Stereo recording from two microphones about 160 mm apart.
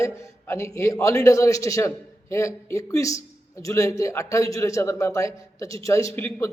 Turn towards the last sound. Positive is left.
turn(degrees=15)  # may be behind; listen again after turning